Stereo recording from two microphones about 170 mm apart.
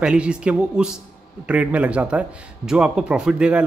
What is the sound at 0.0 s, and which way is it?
A man's voice, 5° right (ahead or behind).